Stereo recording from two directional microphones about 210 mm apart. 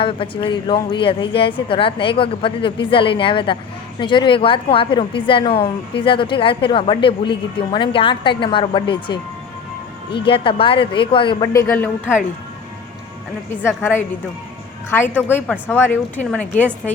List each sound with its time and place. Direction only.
0.0 s a woman's voice: 25° left (ahead or behind)
10.2 s a woman's voice: 25° left (ahead or behind)
13.7 s speech: 10° left (ahead or behind)